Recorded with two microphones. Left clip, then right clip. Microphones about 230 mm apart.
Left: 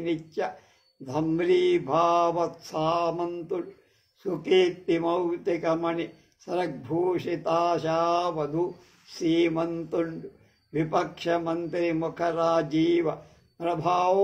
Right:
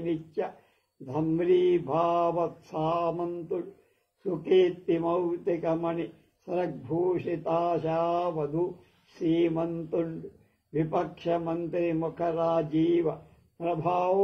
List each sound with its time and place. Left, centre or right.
1.1 s mantra: left
2.0 s mantra: left
2.3 s speech: left
9.2 s mantra: left
9.6 s mantra: left
10.7 s speech: left
12.6 s mantra: left
13.6 s mantra: left